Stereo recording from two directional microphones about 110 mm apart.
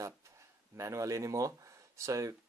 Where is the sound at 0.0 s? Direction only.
25° right (ahead or behind).